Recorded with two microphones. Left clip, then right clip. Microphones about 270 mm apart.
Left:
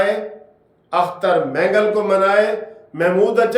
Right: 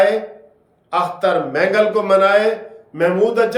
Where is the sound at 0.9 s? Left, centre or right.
Centre.